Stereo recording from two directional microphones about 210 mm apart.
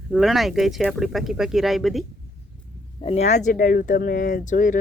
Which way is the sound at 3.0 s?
30° left (ahead or behind).